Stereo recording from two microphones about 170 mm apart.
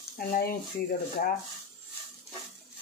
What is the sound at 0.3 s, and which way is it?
Speech, 65° left (ahead or behind).